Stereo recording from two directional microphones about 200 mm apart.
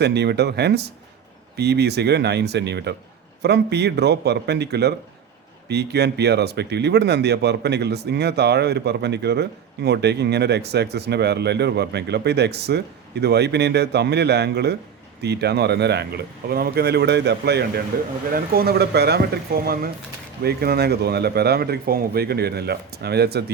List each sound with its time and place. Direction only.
0.0 s speech: 55° right (ahead or behind)